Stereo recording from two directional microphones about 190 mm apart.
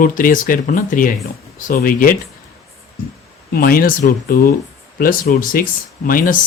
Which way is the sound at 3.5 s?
50° left (ahead or behind).